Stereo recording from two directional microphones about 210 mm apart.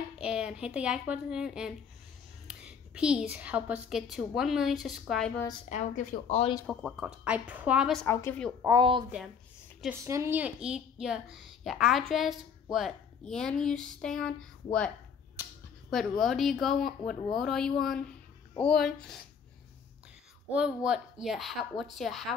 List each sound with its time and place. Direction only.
0.2 s a woman's voice: 5° right (ahead or behind)
5.7 s speech: 35° left (ahead or behind)
6.7 s a woman's voice: centre (ahead or behind)
8.1 s speech: 10° left (ahead or behind)
8.6 s speech: 20° right (ahead or behind)
10.0 s a woman's voice: 15° right (ahead or behind); by 14.9 s 5° left (ahead or behind)
15.9 s a woman's voice: centre (ahead or behind)
20.5 s a woman's voice: 5° right (ahead or behind)